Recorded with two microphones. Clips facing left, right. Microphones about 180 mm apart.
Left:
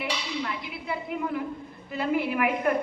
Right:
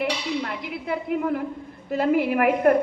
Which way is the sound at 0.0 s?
50° right (ahead or behind).